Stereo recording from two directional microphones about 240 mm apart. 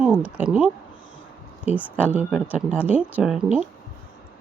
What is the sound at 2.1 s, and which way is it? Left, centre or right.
Speech, centre.